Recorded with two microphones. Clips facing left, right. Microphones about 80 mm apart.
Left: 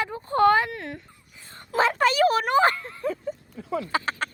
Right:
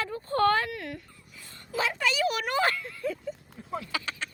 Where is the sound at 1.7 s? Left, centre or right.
Left.